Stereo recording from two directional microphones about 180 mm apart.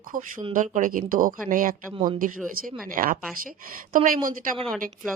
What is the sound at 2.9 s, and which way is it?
A woman's voice, 50° right (ahead or behind).